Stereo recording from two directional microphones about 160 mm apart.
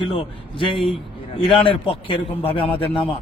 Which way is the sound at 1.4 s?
35° left (ahead or behind).